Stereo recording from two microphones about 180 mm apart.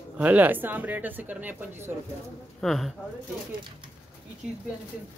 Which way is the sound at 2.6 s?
Centre (ahead or behind).